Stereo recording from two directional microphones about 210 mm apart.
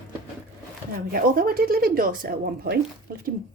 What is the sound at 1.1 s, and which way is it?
Speech, 45° right (ahead or behind).